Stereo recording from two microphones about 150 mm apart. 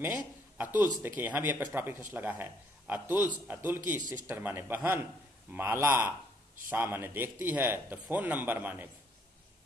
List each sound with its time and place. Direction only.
0.6 s speech: 10° right (ahead or behind)